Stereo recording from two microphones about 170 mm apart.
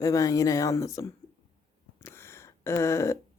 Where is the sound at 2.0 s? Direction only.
15° left (ahead or behind).